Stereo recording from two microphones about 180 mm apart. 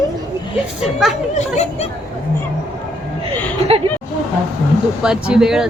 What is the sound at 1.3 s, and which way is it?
Speech, 40° left (ahead or behind).